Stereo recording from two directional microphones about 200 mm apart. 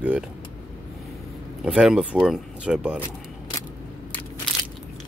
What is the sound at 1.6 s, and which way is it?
Speech, 5° right (ahead or behind).